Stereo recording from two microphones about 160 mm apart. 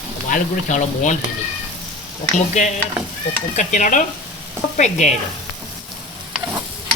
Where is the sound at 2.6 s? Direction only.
45° left (ahead or behind).